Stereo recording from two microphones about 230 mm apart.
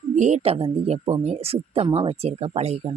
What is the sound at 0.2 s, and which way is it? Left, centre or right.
Speech, right.